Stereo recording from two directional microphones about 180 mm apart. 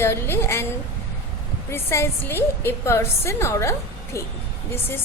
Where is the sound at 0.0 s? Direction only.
15° left (ahead or behind).